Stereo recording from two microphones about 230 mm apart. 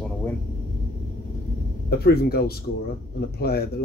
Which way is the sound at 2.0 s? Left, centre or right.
Left.